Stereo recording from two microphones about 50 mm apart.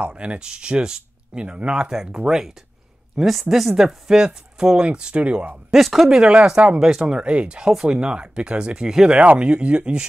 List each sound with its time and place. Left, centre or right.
0.0 s speech: right
5.7 s speech: centre
6.0 s speech: centre
9.2 s speech: right